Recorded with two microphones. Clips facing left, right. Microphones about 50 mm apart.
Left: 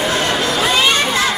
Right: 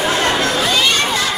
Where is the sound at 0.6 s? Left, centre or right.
Centre.